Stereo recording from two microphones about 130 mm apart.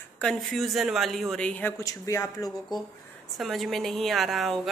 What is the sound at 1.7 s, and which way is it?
Speech, 25° left (ahead or behind).